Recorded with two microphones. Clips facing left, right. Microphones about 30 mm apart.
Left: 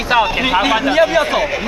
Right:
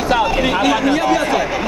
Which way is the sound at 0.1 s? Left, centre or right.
Left.